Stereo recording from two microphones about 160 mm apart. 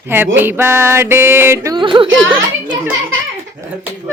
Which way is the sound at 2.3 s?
15° right (ahead or behind).